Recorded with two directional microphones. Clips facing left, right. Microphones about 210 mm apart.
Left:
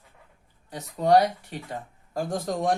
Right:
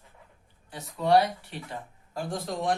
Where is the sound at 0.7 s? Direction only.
40° left (ahead or behind).